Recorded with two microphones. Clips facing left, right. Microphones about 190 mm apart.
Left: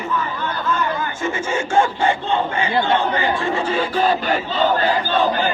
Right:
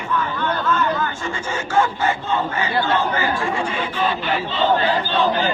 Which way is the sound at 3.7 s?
40° left (ahead or behind).